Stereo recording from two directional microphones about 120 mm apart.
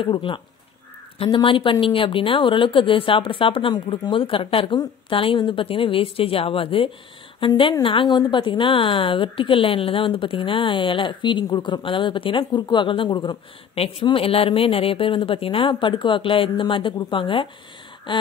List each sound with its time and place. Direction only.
0.0 s a woman's voice: 45° left (ahead or behind)
13.7 s speech: 50° left (ahead or behind)